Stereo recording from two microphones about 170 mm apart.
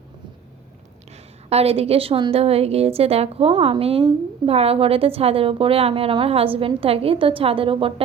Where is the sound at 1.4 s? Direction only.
35° right (ahead or behind).